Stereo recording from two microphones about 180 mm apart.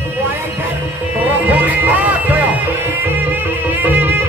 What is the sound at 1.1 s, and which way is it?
Music, 10° right (ahead or behind).